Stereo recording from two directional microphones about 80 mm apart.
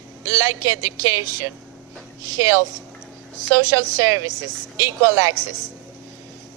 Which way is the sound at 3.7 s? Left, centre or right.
Right.